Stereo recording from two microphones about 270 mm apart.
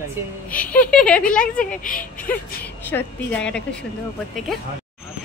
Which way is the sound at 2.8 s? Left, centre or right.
Centre.